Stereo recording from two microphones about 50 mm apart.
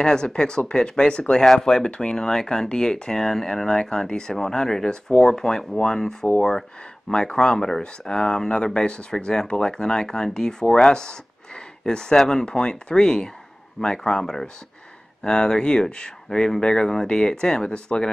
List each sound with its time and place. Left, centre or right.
0.0 s speech: centre